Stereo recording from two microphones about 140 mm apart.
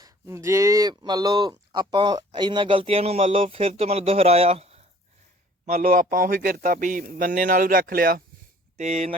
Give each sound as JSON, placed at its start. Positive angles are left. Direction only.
{"t": 0.0, "sound": "speech", "side_deg": -20}
{"t": 5.6, "sound": "a man's voice", "side_deg": -80}
{"t": 8.8, "sound": "speech", "side_deg": -50}